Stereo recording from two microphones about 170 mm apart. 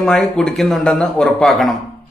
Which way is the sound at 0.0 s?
5° left (ahead or behind).